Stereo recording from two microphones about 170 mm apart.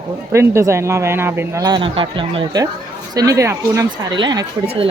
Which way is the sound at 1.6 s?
30° right (ahead or behind).